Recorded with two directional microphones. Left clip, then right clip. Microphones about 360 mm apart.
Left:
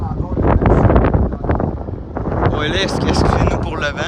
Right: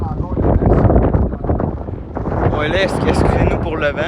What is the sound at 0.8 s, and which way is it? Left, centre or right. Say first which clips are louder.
Wind noise: left 1 dB; centre.